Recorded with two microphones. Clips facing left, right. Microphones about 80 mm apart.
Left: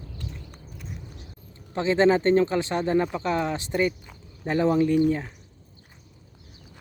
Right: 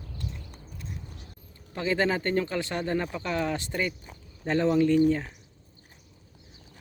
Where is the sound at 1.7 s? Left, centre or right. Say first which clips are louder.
Left 6 dB; left.